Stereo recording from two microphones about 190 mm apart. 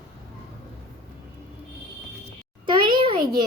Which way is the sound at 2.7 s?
25° right (ahead or behind).